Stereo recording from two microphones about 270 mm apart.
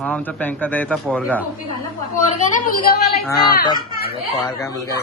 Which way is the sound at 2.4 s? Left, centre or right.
Left.